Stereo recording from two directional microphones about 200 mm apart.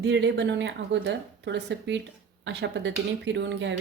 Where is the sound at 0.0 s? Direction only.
60° right (ahead or behind).